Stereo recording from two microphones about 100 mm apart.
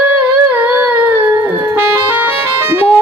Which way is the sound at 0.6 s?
20° right (ahead or behind).